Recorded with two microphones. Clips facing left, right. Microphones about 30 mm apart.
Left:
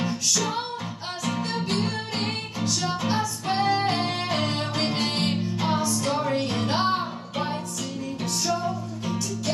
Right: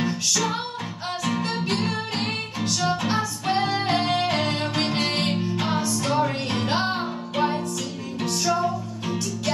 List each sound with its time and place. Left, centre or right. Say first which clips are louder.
0.0 s music: right 2 dB; centre